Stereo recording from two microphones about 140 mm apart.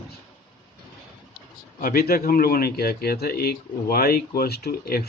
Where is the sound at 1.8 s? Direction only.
90° left.